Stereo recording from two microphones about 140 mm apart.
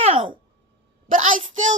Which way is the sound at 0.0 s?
40° right (ahead or behind).